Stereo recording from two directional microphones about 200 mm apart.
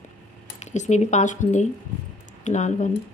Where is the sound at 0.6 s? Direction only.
35° left (ahead or behind).